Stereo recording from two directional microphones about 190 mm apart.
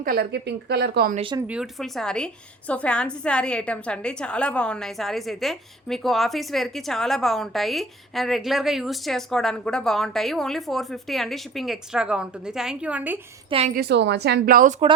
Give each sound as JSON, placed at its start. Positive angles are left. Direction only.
{"t": 0.0, "sound": "speech", "side_deg": -55}
{"t": 1.1, "sound": "speech", "side_deg": -30}
{"t": 1.4, "sound": "a woman's voice", "side_deg": -5}
{"t": 13.7, "sound": "speech", "side_deg": -60}